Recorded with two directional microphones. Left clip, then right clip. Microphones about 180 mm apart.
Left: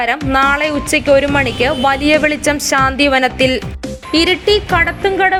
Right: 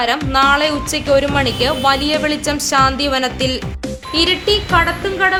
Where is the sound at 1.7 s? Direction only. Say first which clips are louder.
Left 3 dB; 35° left (ahead or behind).